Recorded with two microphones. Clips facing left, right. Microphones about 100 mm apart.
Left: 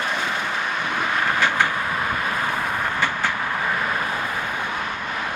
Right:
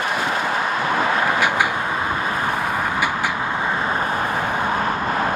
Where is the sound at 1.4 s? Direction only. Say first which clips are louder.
Right 2 dB; 15° right (ahead or behind).